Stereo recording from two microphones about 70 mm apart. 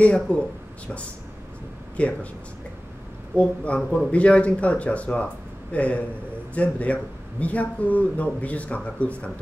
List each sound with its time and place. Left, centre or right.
0.0 s speech: centre
2.0 s speech: centre
3.3 s speech: centre